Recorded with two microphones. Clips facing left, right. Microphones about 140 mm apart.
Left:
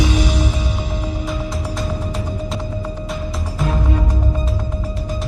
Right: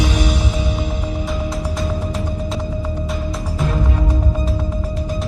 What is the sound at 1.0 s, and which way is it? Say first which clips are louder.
Music: right 1 dB; centre (ahead or behind).